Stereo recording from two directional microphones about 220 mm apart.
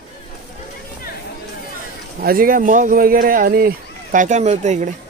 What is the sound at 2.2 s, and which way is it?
Speech, 40° right (ahead or behind).